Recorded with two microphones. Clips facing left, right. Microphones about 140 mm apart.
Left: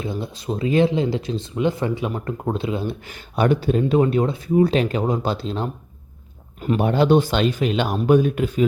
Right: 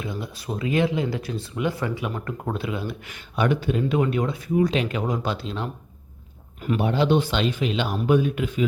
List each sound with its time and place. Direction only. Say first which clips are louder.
0.0 s speech: left 4 dB; 25° left (ahead or behind)
6.7 s speech: left 4 dB; 45° left (ahead or behind)